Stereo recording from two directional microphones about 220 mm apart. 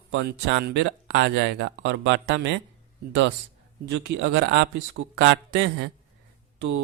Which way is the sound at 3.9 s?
50° right (ahead or behind).